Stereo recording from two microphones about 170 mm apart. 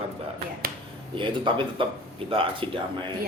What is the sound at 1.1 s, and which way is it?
A man's voice, 30° right (ahead or behind).